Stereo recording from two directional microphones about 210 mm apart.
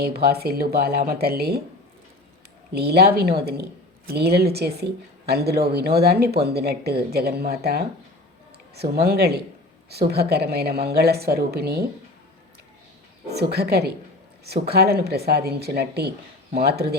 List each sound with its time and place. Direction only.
0.0 s speech: 50° right (ahead or behind)
2.7 s speech: 50° right (ahead or behind)
13.3 s speech: 50° right (ahead or behind)